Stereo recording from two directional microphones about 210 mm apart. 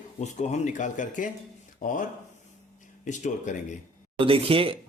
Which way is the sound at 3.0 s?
35° left (ahead or behind).